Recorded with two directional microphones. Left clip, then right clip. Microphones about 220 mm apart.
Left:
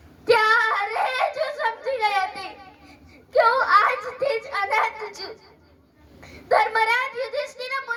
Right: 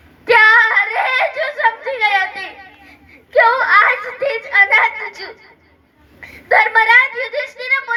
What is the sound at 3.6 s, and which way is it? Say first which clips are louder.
Giggle: right 6 dB; 55° left (ahead or behind).